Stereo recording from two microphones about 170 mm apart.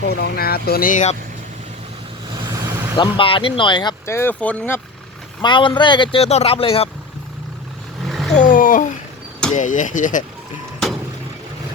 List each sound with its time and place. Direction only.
0.1 s speech: 65° left (ahead or behind); by 1.1 s 50° left (ahead or behind)
2.4 s vehicle: 20° right (ahead or behind)
3.2 s speech: 30° left (ahead or behind); by 4.8 s 10° left (ahead or behind)
5.4 s speech: 30° left (ahead or behind)
8.1 s vehicle: centre (ahead or behind)
8.4 s a sound: 50° left (ahead or behind)
9.6 s speech: 50° left (ahead or behind)